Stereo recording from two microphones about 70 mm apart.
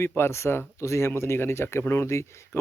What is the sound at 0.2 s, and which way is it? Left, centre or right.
Speech, left.